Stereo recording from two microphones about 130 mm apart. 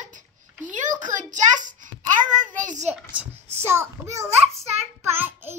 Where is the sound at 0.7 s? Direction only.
75° right (ahead or behind).